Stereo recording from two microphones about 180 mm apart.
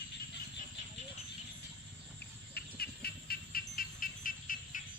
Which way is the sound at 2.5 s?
60° left (ahead or behind).